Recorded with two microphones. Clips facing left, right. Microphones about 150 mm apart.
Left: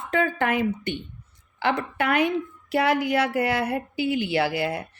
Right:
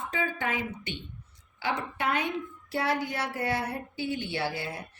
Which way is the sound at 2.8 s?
85° left.